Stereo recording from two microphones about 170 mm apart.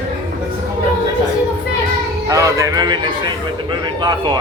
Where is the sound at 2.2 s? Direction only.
20° right (ahead or behind).